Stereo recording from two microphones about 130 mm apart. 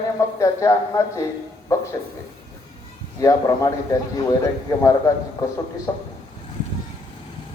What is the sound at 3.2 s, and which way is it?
Speech, 25° left (ahead or behind).